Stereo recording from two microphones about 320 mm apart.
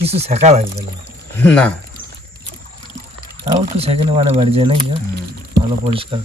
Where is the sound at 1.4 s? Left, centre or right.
Centre.